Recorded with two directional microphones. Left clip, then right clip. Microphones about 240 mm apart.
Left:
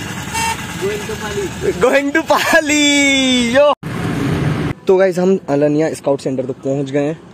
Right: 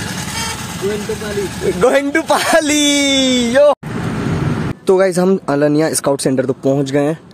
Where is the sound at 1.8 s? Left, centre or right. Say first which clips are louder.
Even; centre.